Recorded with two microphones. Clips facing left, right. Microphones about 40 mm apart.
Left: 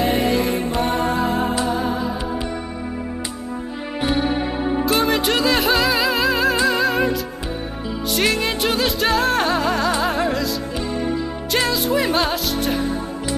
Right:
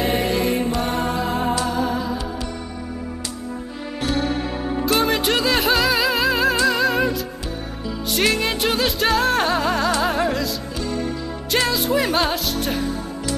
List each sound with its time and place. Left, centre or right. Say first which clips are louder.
0.0 s music: left 2 dB; centre
4.0 s music: left 2 dB; centre
4.8 s music: right 1 dB; centre
10.9 s music: left 1 dB; centre
11.5 s music: even; centre